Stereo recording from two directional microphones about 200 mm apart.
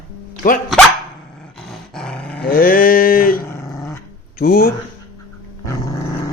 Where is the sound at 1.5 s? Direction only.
5° left (ahead or behind).